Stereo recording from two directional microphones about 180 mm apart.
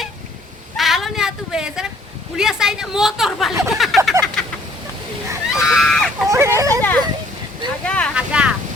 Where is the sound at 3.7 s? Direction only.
Centre (ahead or behind).